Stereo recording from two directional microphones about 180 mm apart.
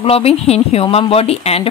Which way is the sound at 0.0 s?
35° left (ahead or behind).